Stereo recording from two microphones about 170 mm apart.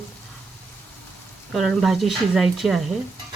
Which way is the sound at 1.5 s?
Centre (ahead or behind).